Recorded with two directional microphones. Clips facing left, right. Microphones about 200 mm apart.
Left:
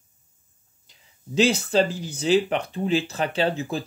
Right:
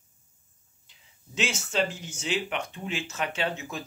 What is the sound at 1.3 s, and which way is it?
Speech, 35° left (ahead or behind).